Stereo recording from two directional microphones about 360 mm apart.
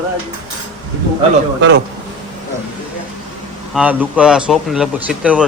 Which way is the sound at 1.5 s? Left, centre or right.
Right.